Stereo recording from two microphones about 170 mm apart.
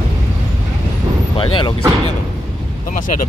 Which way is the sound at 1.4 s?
30° left (ahead or behind).